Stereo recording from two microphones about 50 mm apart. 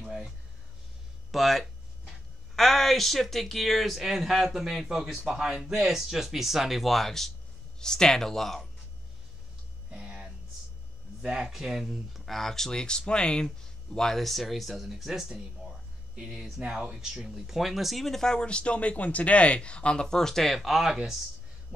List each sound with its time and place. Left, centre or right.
0.0 s a sound: centre
1.3 s speech: centre
9.8 s a sound: centre
11.2 s speech: centre
13.9 s speech: centre
16.2 s speech: centre